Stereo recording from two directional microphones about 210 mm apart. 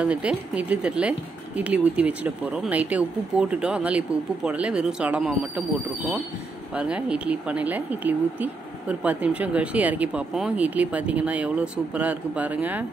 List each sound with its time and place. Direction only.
0.0 s speech: 5° right (ahead or behind)
6.7 s speech: 5° right (ahead or behind)